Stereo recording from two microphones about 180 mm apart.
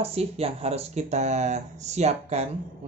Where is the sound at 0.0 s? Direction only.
35° right (ahead or behind).